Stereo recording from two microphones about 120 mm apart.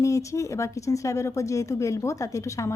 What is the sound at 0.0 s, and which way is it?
A woman's voice, 25° left (ahead or behind).